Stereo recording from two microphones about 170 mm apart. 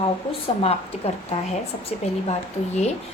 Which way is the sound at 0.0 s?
35° left (ahead or behind).